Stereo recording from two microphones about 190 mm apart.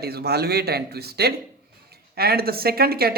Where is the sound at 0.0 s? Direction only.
55° right (ahead or behind).